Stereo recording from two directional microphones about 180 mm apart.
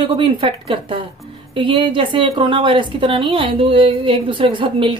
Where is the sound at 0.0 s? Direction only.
30° right (ahead or behind).